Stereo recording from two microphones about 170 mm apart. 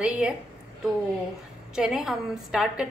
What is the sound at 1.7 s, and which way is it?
A woman's voice, 5° right (ahead or behind).